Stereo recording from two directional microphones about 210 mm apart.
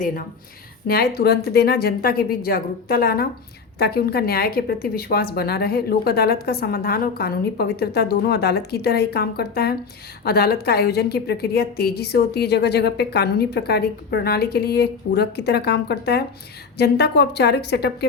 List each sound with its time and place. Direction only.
0.9 s a woman's voice: 50° left (ahead or behind)